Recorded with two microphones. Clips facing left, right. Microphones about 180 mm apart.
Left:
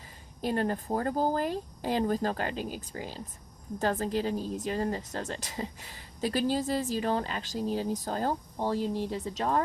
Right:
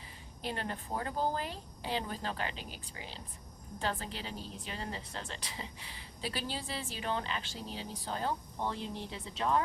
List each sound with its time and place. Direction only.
0.4 s speech: 45° left (ahead or behind)